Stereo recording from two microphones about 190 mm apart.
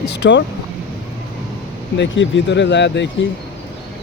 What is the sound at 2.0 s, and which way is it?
Speech, 75° left (ahead or behind).